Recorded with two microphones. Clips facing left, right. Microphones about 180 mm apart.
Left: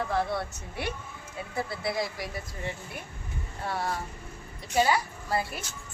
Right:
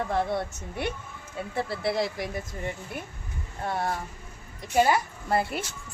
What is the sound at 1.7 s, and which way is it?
Speech, 55° right (ahead or behind).